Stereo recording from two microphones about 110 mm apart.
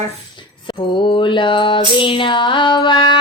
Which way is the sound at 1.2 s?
45° left (ahead or behind).